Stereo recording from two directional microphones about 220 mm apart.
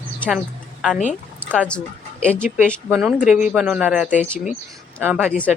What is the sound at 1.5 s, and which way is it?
Speech, 5° left (ahead or behind).